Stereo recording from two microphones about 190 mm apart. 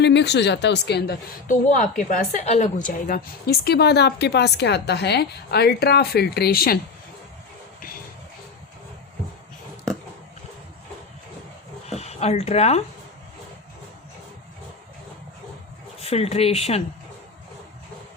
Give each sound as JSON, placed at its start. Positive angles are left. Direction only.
{"t": 0.0, "sound": "speech", "side_deg": 65}
{"t": 1.5, "sound": "a woman's voice", "side_deg": 45}
{"t": 2.8, "sound": "speech", "side_deg": 45}
{"t": 11.9, "sound": "speech", "side_deg": 35}
{"t": 16.0, "sound": "a woman's voice", "side_deg": 30}